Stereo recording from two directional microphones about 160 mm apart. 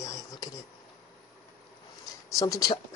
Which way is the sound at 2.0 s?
20° left (ahead or behind).